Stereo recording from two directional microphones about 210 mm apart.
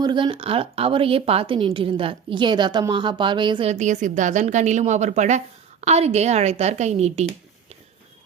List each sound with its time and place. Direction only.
0.0 s a woman's voice: 20° right (ahead or behind)